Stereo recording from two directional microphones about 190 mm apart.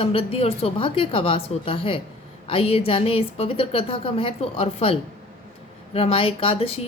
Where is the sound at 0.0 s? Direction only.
30° left (ahead or behind).